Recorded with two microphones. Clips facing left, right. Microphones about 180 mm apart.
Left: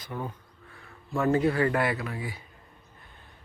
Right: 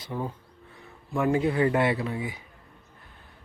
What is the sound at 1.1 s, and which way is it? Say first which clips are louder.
Speech: even; 15° right (ahead or behind).